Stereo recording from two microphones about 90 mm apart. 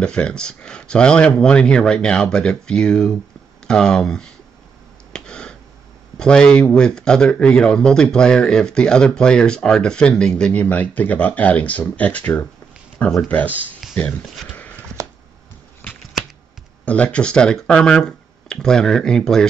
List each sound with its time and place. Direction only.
0.0 s speech: 10° left (ahead or behind)
5.1 s a sound: 10° left (ahead or behind)
6.1 s speech: 10° left (ahead or behind)
16.8 s speech: 15° left (ahead or behind)